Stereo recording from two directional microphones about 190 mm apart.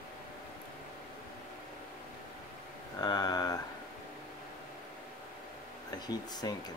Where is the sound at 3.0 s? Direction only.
20° left (ahead or behind).